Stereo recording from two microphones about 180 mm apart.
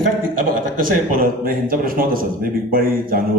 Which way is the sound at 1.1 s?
55° right (ahead or behind).